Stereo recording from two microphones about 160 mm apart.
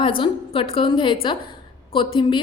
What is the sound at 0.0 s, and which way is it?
A woman's voice, 30° left (ahead or behind).